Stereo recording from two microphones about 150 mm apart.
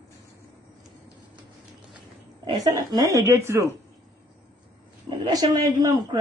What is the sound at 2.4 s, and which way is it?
A woman's voice, 25° right (ahead or behind).